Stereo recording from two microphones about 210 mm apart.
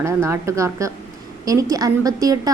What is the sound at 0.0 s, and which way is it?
A woman's voice, 15° right (ahead or behind).